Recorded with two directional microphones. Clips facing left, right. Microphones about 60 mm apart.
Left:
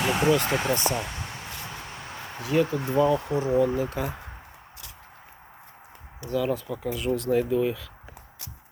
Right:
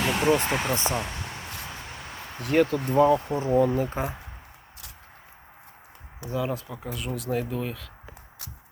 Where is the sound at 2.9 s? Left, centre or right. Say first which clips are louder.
Right 3 dB; right.